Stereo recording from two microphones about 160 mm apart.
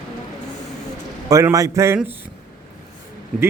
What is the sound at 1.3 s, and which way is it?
Speech, 20° right (ahead or behind).